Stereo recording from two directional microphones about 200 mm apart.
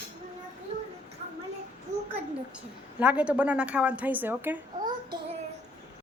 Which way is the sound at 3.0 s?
5° right (ahead or behind).